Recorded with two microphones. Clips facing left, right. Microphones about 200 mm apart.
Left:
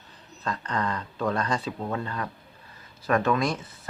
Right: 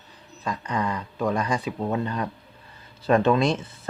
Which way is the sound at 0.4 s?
15° right (ahead or behind).